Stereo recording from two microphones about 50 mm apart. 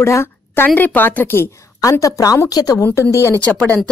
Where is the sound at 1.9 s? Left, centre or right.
Left.